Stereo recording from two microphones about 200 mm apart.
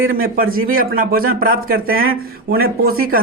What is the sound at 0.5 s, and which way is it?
A man's voice, 45° right (ahead or behind).